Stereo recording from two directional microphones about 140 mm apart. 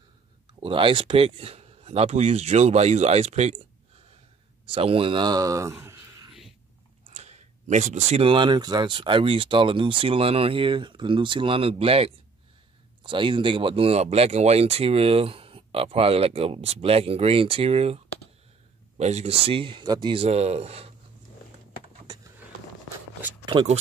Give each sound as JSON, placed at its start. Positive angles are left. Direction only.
{"t": 0.6, "sound": "speech", "side_deg": -40}
{"t": 4.6, "sound": "speech", "side_deg": -40}
{"t": 7.1, "sound": "speech", "side_deg": -55}